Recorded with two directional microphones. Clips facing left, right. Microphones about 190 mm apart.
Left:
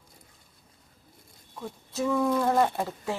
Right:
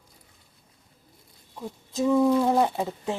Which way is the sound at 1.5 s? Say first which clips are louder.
Right 3 dB; 15° right (ahead or behind).